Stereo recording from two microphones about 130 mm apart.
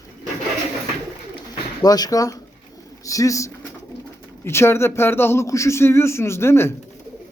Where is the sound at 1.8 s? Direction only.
30° left (ahead or behind).